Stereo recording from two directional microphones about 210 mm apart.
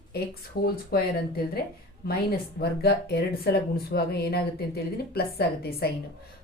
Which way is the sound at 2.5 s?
50° left (ahead or behind).